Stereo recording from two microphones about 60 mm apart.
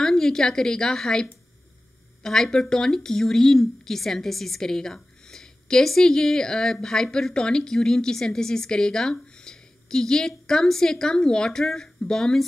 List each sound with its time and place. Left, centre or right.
0.0 s speech: centre